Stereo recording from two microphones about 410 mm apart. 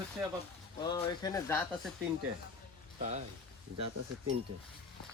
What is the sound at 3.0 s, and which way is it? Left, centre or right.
Speech, centre.